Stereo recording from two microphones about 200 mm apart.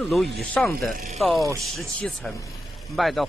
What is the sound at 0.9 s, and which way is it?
Speech, 45° right (ahead or behind).